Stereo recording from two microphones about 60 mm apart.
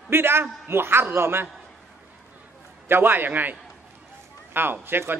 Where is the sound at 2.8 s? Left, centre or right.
Right.